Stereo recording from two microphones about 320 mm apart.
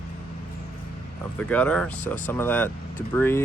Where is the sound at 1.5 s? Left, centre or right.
Centre.